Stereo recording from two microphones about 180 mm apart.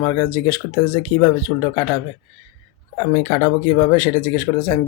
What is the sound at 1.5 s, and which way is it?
Speech, 20° left (ahead or behind).